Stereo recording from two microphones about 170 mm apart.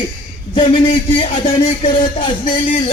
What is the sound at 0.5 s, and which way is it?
Speech, 30° left (ahead or behind).